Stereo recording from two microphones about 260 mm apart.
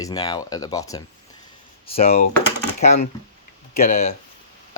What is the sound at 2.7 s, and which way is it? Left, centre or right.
Speech, left.